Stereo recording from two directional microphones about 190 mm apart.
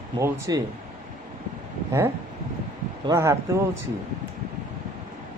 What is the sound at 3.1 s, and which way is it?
Speech, 15° right (ahead or behind).